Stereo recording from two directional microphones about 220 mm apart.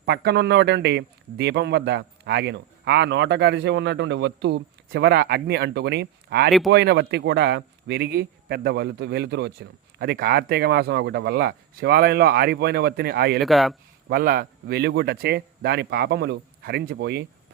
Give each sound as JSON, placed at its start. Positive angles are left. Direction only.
{"t": 0.0, "sound": "a man's voice", "side_deg": -50}
{"t": 13.4, "sound": "speech", "side_deg": 0}
{"t": 14.1, "sound": "a man's voice", "side_deg": -45}